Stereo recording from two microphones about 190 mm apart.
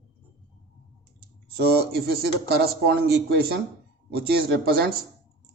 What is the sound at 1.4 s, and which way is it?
Speech, 55° right (ahead or behind).